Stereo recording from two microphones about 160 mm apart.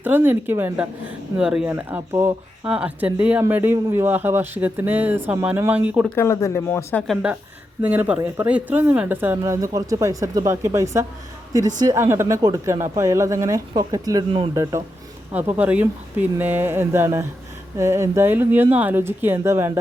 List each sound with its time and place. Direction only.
0.0 s speech: 10° right (ahead or behind)
6.1 s speech: 20° left (ahead or behind)
7.1 s a woman's voice: 5° right (ahead or behind)